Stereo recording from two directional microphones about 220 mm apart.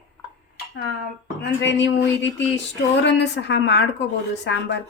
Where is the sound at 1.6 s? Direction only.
55° left (ahead or behind).